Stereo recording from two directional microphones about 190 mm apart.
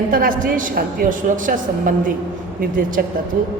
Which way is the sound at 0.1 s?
45° right (ahead or behind).